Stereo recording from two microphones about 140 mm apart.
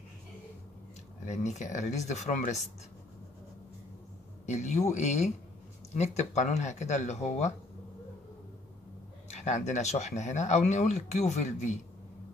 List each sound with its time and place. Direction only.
1.2 s speech: 55° left (ahead or behind)
4.5 s speech: 55° left (ahead or behind)
9.3 s speech: 55° left (ahead or behind)